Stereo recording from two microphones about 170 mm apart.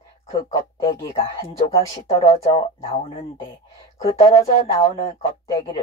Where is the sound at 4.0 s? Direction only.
35° left (ahead or behind).